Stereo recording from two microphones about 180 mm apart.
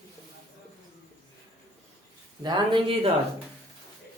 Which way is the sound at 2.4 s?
25° right (ahead or behind).